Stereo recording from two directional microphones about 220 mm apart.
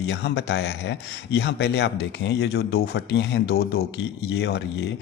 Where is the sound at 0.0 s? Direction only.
50° left (ahead or behind).